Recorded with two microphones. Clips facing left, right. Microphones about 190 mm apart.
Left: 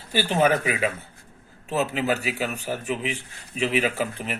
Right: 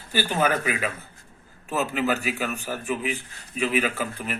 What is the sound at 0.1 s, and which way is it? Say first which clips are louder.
Speech: left 3 dB; 25° left (ahead or behind).